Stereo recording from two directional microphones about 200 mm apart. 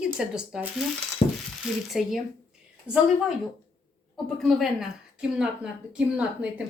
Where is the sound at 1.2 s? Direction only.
35° left (ahead or behind).